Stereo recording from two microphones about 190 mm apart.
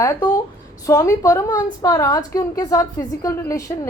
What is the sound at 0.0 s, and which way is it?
A woman's voice, 15° left (ahead or behind).